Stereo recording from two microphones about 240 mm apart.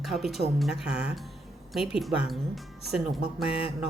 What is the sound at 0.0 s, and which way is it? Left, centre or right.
A woman's voice, centre.